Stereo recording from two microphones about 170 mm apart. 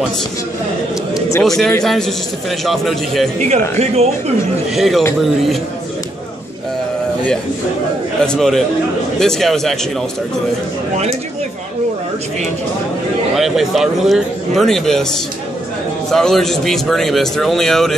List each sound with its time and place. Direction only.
1.4 s a man's voice: centre (ahead or behind)
3.3 s speech: 40° right (ahead or behind)
4.7 s a man's voice: centre (ahead or behind)
8.2 s a man's voice: 5° left (ahead or behind)
13.4 s a man's voice: centre (ahead or behind)
16.1 s a man's voice: centre (ahead or behind)